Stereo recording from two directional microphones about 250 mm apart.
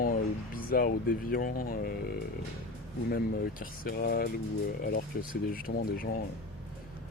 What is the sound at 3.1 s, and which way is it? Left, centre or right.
Speech, left.